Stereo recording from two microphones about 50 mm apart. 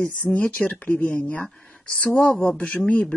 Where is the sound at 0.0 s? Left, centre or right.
Left.